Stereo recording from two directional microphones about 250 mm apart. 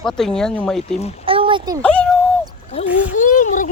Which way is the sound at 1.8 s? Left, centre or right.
Centre.